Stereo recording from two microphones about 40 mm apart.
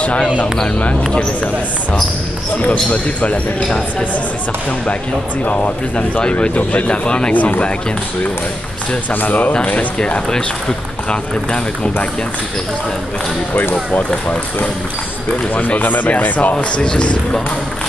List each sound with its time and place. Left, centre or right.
0.0 s speech: left
2.6 s speech: left
5.4 s speech: left
6.9 s speech: left
7.3 s speech: left
9.1 s speech: left
9.9 s speech: left
15.5 s speech: left
16.5 s speech: left